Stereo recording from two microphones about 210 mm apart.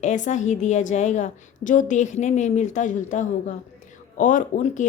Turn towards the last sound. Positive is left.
turn(degrees=35)  # may be behind; listen again after turning